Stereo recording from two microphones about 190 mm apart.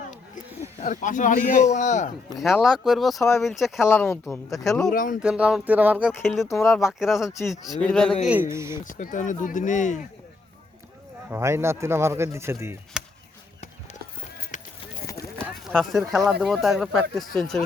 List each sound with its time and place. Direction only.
0.8 s a man's voice: 45° left (ahead or behind)
2.3 s speech: centre (ahead or behind)
3.8 s speech: 10° left (ahead or behind)
4.3 s speech: centre (ahead or behind)
4.9 s speech: 45° left (ahead or behind)
5.2 s speech: 5° right (ahead or behind)
8.2 s speech: 10° right (ahead or behind)
8.8 s a man's voice: 45° left (ahead or behind)
11.3 s speech: 15° right (ahead or behind)
12.9 s chop: 5° right (ahead or behind)
14.5 s clip-clop: 40° left (ahead or behind)
15.7 s speech: centre (ahead or behind)